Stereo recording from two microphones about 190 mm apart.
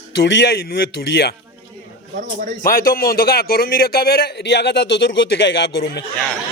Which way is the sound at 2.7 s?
50° left (ahead or behind).